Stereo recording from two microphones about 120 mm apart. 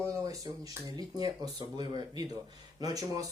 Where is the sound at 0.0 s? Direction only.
30° right (ahead or behind).